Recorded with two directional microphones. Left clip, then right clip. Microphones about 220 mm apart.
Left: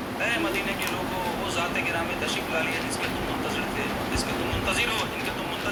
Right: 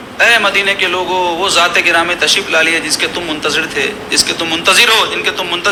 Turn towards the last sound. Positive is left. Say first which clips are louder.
# right 17 dB
turn(degrees=-45)  # may be behind; listen again after turning